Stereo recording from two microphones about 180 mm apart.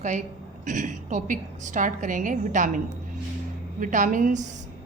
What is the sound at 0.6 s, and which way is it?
A woman's voice, 45° right (ahead or behind).